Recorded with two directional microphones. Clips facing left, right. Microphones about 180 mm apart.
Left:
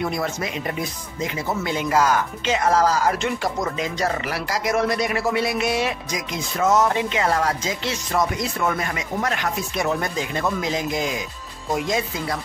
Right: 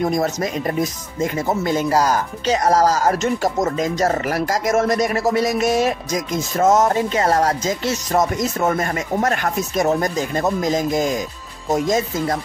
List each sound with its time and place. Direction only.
0.0 s speech: 40° right (ahead or behind)